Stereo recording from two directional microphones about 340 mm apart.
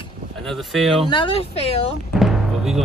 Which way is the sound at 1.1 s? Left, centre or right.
Centre.